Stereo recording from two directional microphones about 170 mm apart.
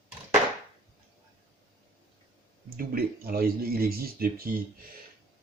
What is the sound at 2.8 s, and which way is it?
Speech, 60° right (ahead or behind).